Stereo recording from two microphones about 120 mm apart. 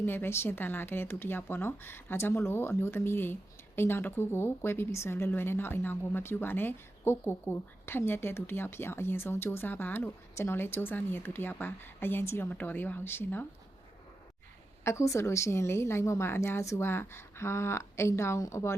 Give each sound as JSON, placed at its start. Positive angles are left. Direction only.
{"t": 0.0, "sound": "speech", "side_deg": 20}
{"t": 14.8, "sound": "speech", "side_deg": 25}